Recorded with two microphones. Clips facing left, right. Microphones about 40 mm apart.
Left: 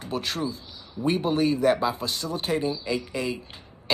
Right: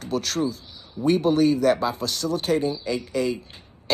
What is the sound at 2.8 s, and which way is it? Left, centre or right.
Speech, left.